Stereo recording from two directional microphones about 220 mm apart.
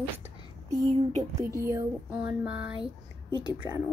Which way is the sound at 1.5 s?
15° right (ahead or behind).